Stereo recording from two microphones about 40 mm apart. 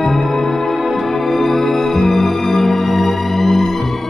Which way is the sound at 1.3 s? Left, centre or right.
Centre.